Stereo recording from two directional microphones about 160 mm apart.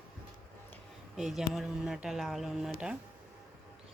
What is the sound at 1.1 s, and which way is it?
Speech, 5° right (ahead or behind).